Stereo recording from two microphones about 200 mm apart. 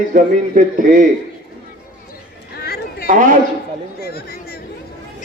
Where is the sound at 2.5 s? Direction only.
50° left (ahead or behind).